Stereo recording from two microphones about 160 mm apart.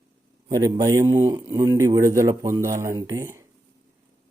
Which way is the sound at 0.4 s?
25° right (ahead or behind).